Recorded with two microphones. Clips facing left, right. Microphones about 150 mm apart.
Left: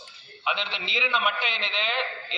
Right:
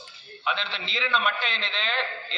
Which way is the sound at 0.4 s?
15° left (ahead or behind).